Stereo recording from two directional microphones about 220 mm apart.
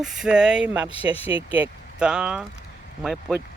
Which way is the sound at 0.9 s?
25° left (ahead or behind).